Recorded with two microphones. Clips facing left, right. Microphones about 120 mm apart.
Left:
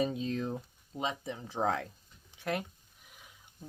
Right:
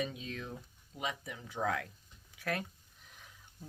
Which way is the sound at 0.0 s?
35° left (ahead or behind).